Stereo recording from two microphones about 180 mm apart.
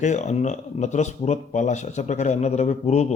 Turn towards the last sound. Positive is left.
turn(degrees=40)  # may be behind; listen again after turning